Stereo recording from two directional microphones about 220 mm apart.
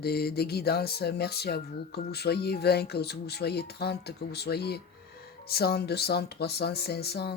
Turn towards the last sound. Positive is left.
turn(degrees=45)  # may be behind; listen again after turning